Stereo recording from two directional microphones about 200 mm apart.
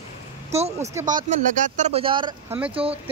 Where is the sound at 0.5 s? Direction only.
30° right (ahead or behind).